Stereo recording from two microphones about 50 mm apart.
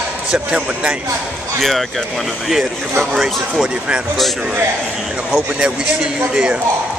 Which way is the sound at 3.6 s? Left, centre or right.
Centre.